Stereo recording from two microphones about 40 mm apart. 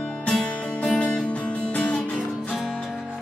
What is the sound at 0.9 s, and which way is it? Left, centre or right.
Music, left.